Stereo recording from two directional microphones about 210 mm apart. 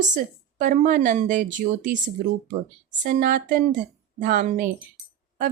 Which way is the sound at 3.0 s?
40° right (ahead or behind).